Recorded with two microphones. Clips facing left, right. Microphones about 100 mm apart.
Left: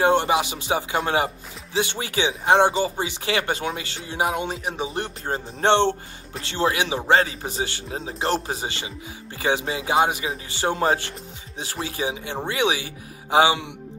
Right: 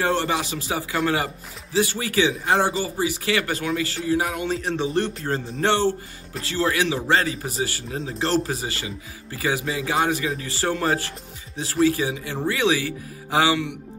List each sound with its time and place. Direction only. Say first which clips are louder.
0.0 s speech: left 4 dB; 20° left (ahead or behind)
4.6 s music: right 3 dB; 5° left (ahead or behind)
4.9 s speech: right 4 dB; 20° left (ahead or behind)